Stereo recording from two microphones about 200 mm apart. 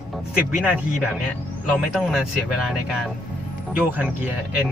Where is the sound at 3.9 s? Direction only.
5° right (ahead or behind).